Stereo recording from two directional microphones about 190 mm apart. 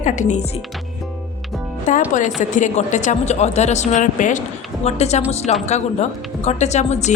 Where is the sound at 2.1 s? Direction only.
40° left (ahead or behind).